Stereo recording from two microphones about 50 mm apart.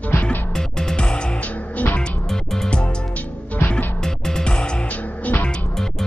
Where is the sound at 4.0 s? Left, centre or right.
Centre.